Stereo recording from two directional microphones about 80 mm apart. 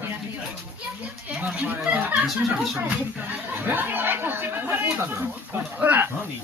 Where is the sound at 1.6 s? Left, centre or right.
Right.